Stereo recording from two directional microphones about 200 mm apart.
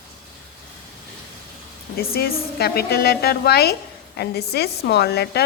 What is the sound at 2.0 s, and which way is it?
A woman's voice, 50° left (ahead or behind).